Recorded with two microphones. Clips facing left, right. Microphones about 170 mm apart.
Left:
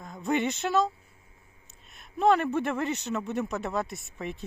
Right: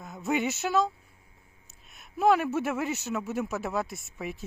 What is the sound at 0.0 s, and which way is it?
A man's voice, 5° right (ahead or behind).